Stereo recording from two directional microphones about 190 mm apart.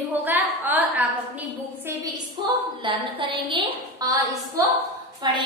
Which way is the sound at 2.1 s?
25° right (ahead or behind).